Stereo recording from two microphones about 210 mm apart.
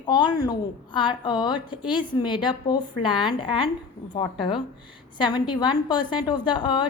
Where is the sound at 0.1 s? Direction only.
20° left (ahead or behind).